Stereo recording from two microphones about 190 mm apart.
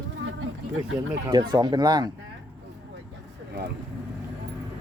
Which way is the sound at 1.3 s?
20° right (ahead or behind).